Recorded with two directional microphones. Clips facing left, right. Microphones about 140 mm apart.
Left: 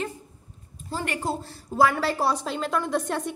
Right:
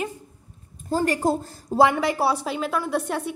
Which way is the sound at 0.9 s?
40° right (ahead or behind).